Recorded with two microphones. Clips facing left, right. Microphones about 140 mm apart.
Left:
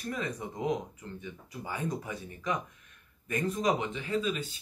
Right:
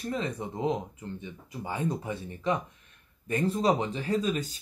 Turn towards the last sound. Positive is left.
turn(degrees=-40)  # may be behind; listen again after turning